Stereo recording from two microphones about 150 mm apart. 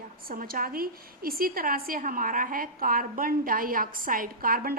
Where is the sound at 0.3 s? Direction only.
75° right (ahead or behind).